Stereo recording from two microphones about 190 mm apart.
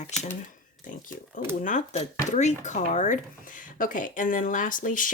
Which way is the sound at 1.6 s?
40° left (ahead or behind).